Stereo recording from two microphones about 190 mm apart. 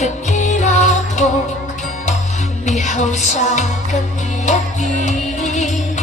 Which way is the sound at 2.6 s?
40° left (ahead or behind).